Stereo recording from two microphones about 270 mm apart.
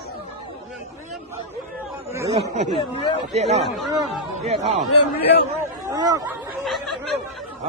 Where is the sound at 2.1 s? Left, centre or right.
Centre.